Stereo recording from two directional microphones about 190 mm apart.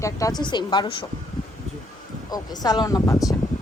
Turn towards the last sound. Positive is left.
turn(degrees=20)  # may be behind; listen again after turning